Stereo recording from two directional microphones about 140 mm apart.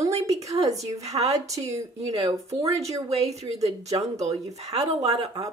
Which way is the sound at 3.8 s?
25° right (ahead or behind).